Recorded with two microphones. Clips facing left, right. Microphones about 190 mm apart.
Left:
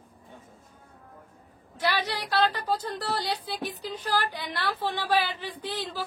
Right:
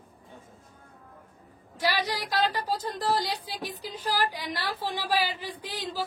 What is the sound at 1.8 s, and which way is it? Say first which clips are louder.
Speech: even; 10° right (ahead or behind).